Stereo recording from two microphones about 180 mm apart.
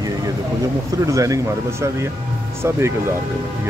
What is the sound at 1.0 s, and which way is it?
Speech, 15° right (ahead or behind).